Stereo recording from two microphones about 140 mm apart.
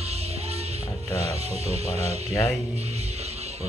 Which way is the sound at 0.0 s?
45° right (ahead or behind).